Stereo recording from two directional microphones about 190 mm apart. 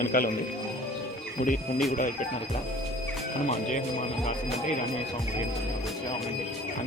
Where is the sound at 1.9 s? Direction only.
45° left (ahead or behind).